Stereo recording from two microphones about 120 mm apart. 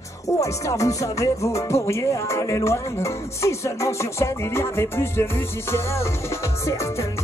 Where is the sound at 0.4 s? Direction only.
25° left (ahead or behind).